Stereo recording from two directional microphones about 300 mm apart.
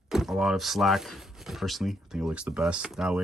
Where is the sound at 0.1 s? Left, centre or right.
Centre.